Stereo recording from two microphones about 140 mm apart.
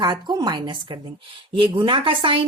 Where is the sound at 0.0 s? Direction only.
30° right (ahead or behind).